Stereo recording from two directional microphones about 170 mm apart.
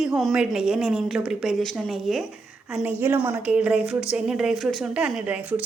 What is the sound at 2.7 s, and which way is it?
A woman's voice, 10° right (ahead or behind).